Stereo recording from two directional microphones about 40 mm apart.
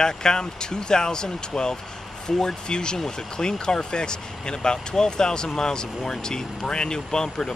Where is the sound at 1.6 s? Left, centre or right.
Centre.